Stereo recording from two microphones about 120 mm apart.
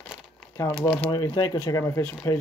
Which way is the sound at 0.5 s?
25° left (ahead or behind).